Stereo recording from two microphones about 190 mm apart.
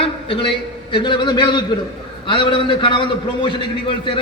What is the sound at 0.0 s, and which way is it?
A man's voice, 30° left (ahead or behind).